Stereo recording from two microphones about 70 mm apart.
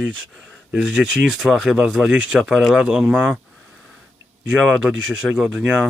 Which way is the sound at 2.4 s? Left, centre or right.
Centre.